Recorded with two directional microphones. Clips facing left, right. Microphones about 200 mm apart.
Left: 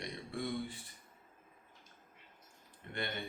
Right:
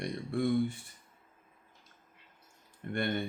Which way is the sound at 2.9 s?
50° right (ahead or behind).